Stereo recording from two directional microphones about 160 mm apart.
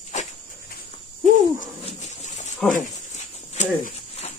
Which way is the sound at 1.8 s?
45° left (ahead or behind).